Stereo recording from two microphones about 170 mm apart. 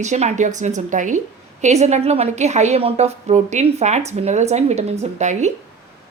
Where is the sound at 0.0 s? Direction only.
40° right (ahead or behind).